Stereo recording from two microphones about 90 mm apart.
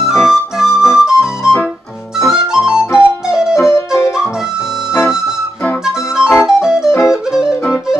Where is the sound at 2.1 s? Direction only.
5° right (ahead or behind).